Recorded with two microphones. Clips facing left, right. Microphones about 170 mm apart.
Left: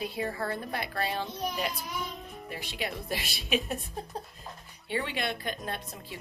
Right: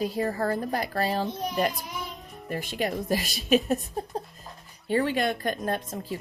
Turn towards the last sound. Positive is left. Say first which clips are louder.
# right 8 dB
turn(degrees=-45)  # may be behind; listen again after turning